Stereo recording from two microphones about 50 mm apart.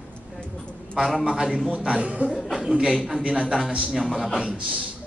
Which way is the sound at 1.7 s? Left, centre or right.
Right.